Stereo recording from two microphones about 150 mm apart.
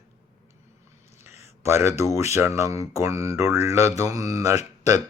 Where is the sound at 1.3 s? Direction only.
45° left (ahead or behind).